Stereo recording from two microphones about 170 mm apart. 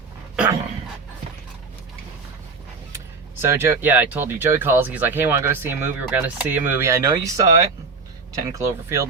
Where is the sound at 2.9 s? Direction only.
15° right (ahead or behind).